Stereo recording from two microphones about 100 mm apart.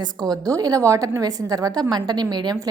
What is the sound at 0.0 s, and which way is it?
A woman's voice, 40° right (ahead or behind).